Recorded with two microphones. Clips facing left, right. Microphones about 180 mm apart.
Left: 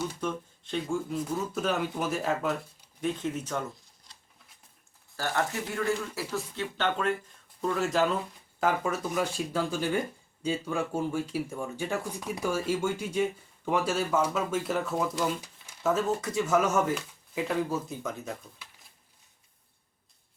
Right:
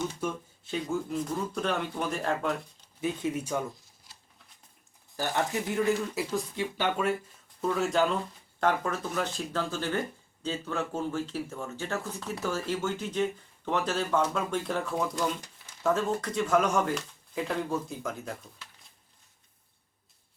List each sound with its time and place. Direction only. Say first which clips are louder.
0.2 s speech: even; 5° right (ahead or behind)
3.0 s a sound: even; 10° right (ahead or behind)
5.1 s speech: right 1 dB; 15° right (ahead or behind); by 18.9 s centre (ahead or behind)